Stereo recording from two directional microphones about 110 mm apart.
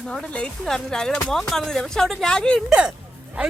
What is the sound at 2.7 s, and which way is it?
Speech, 10° right (ahead or behind).